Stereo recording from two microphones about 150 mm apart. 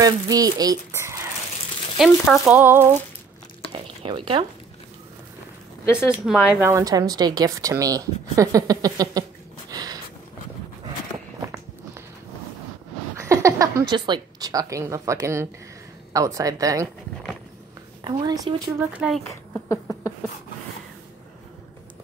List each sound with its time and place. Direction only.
0.0 s speech: 25° right (ahead or behind)
2.2 s speech: 5° right (ahead or behind)
3.7 s a sound: 35° right (ahead or behind)
6.2 s speech: centre (ahead or behind)
6.6 s speech: 20° right (ahead or behind)
9.7 s a sound: 25° right (ahead or behind)
13.2 s a woman's voice: 20° right (ahead or behind)
18.0 s speech: 25° right (ahead or behind)
18.8 s speech: 10° right (ahead or behind)
19.5 s a sound: 15° left (ahead or behind)